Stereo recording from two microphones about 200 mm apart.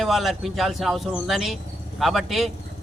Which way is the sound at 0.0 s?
Centre (ahead or behind).